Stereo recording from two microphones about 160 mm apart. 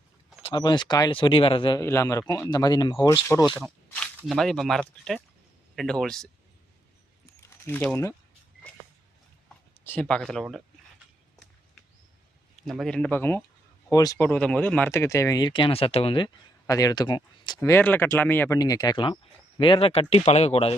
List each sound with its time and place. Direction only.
0.5 s speech: 30° left (ahead or behind)
1.8 s speech: 15° left (ahead or behind)
3.6 s snake: 10° left (ahead or behind)
4.3 s speech: centre (ahead or behind)
7.7 s speech: 10° left (ahead or behind)
9.8 s speech: 10° left (ahead or behind)
12.6 s speech: centre (ahead or behind); by 14.3 s 20° left (ahead or behind)
14.3 s speech: 10° left (ahead or behind); by 16.3 s 35° left (ahead or behind)
16.6 s speech: 20° left (ahead or behind)
17.6 s speech: 15° left (ahead or behind); by 20.7 s 40° left (ahead or behind)